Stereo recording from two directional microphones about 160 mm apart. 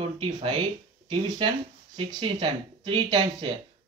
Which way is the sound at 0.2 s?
30° right (ahead or behind).